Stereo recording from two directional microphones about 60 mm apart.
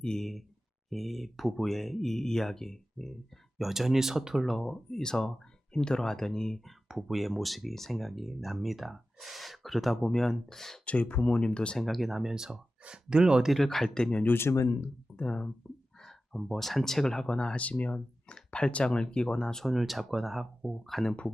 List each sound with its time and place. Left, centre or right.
0.0 s speech: centre
3.6 s speech: centre
6.8 s speech: centre
10.8 s speech: left
11.8 s speech: centre
13.5 s speech: centre
14.3 s speech: left
14.5 s speech: left
15.1 s speech: centre
19.7 s speech: centre